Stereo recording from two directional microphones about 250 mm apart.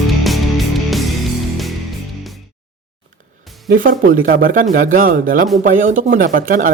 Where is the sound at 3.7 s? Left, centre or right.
Right.